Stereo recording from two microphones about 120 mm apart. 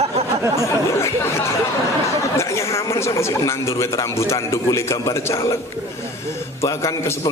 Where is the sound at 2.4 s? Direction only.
25° left (ahead or behind).